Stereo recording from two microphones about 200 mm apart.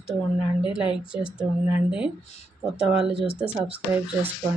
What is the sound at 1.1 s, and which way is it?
A woman's voice, 5° right (ahead or behind).